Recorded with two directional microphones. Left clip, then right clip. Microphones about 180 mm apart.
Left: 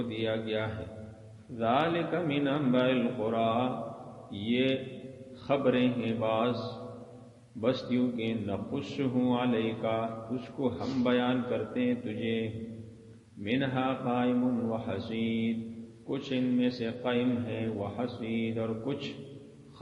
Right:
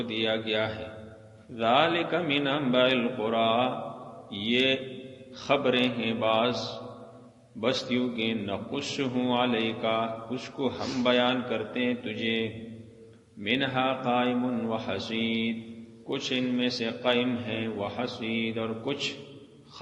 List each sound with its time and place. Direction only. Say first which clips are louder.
0.1 s a man's voice: right 5 dB; 45° right (ahead or behind)
7.6 s a man's voice: right 2 dB; 45° right (ahead or behind)